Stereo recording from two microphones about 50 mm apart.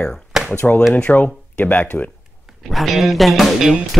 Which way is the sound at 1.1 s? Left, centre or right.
Left.